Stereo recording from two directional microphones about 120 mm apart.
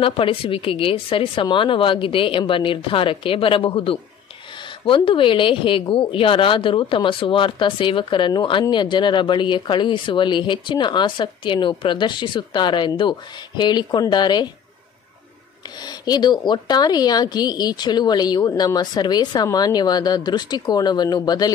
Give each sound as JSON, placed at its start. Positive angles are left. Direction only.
{"t": 0.0, "sound": "a woman's voice", "side_deg": 50}
{"t": 15.8, "sound": "a woman's voice", "side_deg": 35}